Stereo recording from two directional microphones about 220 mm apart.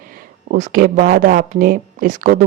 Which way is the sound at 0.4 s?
40° right (ahead or behind).